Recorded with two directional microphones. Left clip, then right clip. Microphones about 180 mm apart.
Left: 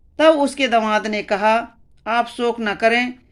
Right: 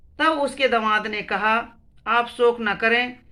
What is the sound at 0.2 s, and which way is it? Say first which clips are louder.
Speech: left 5 dB; 40° left (ahead or behind).